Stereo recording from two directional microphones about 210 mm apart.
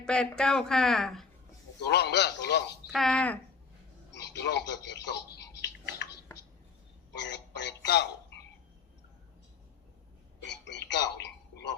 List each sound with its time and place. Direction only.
0.0 s speech: 5° left (ahead or behind)
1.9 s speech: 50° left (ahead or behind)
2.9 s speech: centre (ahead or behind)
4.1 s a sound: 55° left (ahead or behind)
7.1 s speech: 55° left (ahead or behind)
10.4 s a sound: 55° left (ahead or behind)